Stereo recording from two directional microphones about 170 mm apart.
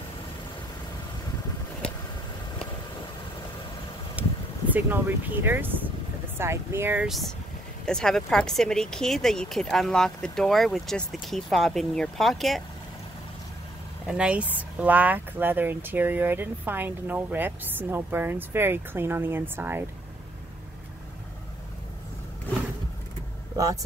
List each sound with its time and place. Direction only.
4.2 s a sound: 10° right (ahead or behind)
4.7 s speech: 10° right (ahead or behind)
7.1 s speech: centre (ahead or behind)
14.0 s speech: 5° right (ahead or behind)
23.5 s speech: 20° right (ahead or behind)